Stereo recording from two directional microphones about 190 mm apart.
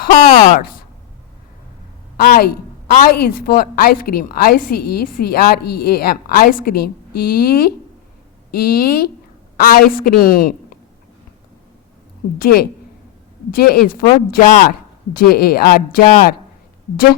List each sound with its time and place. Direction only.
0.0 s a woman's voice: 45° left (ahead or behind)
2.1 s a sound: 55° left (ahead or behind)
2.9 s a woman's voice: 50° left (ahead or behind)
8.4 s a woman's voice: 50° left (ahead or behind)
12.4 s a woman's voice: 55° left (ahead or behind)